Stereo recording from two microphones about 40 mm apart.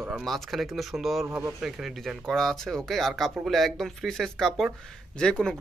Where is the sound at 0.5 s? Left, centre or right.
Centre.